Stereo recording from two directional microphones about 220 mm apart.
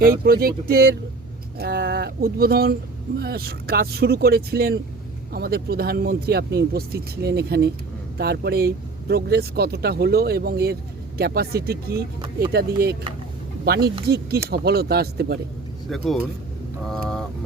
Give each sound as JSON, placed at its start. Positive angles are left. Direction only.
{"t": 0.0, "sound": "speech", "side_deg": -40}
{"t": 15.9, "sound": "speech", "side_deg": 0}